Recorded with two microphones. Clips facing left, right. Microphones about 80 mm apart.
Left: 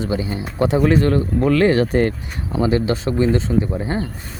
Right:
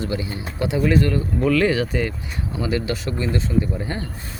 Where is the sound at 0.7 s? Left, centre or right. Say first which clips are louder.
Left 3 dB; left.